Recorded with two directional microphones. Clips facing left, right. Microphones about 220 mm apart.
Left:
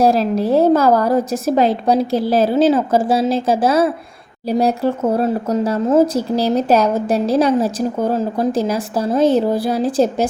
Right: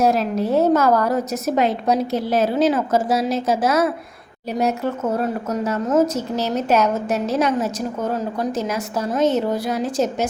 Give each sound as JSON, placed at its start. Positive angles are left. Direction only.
{"t": 0.0, "sound": "speech", "side_deg": 30}